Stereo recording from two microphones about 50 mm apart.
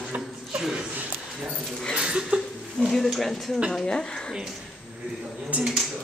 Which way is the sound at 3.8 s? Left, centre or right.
Centre.